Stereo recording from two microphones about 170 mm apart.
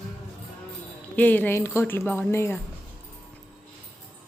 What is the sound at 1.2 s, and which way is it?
Speech, 10° left (ahead or behind).